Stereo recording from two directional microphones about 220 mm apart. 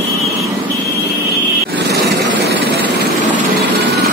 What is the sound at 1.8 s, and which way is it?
Vehicle, 50° right (ahead or behind).